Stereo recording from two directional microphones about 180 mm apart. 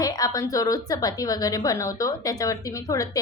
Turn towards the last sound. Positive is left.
turn(degrees=20)  # may be behind; listen again after turning